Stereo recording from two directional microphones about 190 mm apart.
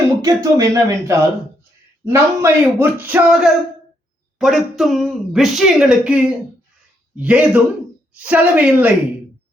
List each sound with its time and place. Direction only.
0.2 s speech: 15° right (ahead or behind)